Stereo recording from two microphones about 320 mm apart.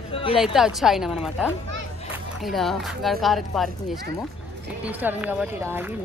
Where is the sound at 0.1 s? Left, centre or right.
Centre.